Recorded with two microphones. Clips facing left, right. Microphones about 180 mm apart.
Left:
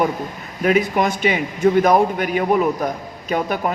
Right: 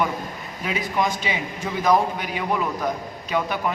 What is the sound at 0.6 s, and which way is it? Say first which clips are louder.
A man's voice: left 8 dB; 60° left (ahead or behind).